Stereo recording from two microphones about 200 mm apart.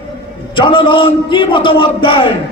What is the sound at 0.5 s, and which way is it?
A man's voice, 25° left (ahead or behind).